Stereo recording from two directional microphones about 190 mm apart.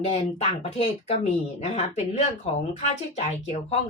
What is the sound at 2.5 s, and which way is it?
Speech, 30° left (ahead or behind).